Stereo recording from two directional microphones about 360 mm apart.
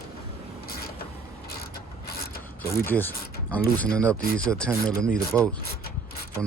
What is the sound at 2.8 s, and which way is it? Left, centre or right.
Speech, centre.